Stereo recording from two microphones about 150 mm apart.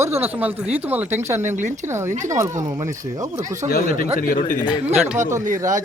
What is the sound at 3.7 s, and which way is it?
Speech, 75° left (ahead or behind).